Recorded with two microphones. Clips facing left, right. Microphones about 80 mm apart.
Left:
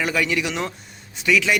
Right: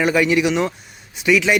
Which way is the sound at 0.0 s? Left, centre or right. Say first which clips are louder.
Right 6 dB; right.